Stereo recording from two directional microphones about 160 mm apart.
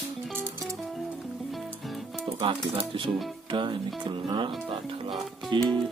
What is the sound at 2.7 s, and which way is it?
Speech, 30° right (ahead or behind).